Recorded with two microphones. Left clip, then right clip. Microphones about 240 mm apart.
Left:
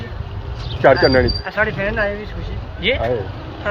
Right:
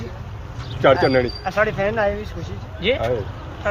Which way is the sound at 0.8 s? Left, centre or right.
Centre.